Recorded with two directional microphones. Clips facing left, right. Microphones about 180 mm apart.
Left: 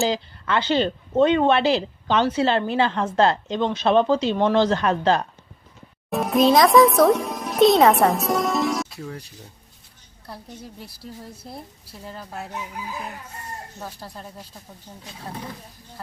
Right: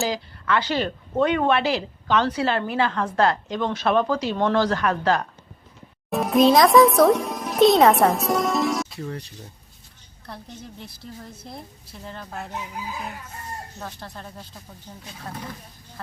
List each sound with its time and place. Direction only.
0.0 s a woman's voice: 25° left (ahead or behind)
6.1 s a child's voice: centre (ahead or behind)
12.0 s speech: 5° left (ahead or behind)
13.7 s a woman's voice: 10° left (ahead or behind)